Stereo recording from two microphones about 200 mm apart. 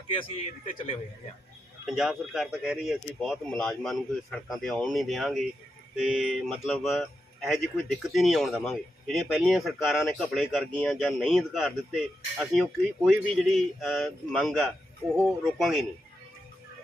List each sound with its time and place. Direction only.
0.1 s a man's voice: 25° left (ahead or behind)
1.9 s speech: centre (ahead or behind)